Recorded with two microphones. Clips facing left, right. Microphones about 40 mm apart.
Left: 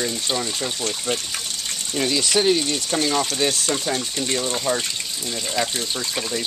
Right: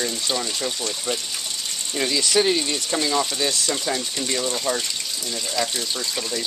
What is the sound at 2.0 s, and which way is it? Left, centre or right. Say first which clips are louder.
Speech: left 1 dB; centre.